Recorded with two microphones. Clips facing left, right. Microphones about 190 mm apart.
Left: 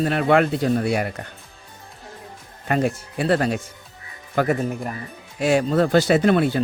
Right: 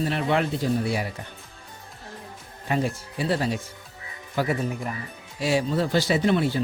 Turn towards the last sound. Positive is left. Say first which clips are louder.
# left 5 dB
turn(degrees=60)  # may be behind; listen again after turning